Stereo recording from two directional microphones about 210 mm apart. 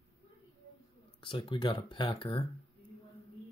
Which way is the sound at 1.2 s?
25° left (ahead or behind).